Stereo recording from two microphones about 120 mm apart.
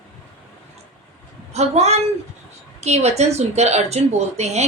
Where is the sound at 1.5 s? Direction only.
65° right (ahead or behind).